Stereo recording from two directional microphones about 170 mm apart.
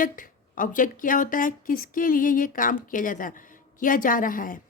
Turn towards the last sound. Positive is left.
turn(degrees=55)  # may be behind; listen again after turning